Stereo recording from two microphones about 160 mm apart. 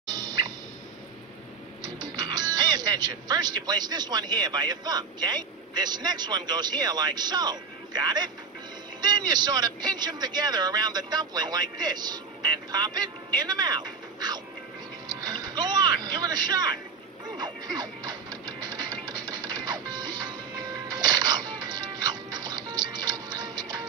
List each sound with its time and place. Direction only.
0.0 s a sound: 25° right (ahead or behind)
1.8 s a man's voice: 25° right (ahead or behind)
15.0 s vehicle: 25° right (ahead or behind)
17.4 s music: 25° right (ahead or behind)